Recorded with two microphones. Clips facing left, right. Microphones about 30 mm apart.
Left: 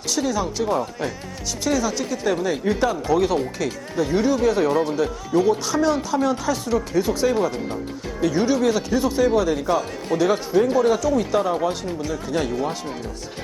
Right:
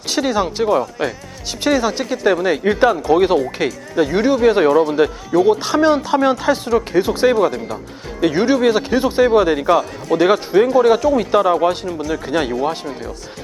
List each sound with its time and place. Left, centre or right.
0.1 s speech: right